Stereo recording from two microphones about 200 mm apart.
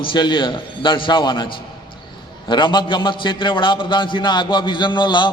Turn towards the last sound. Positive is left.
turn(degrees=20)  # may be behind; listen again after turning